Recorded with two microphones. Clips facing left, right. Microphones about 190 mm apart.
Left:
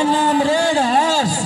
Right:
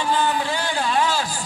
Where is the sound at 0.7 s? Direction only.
30° left (ahead or behind).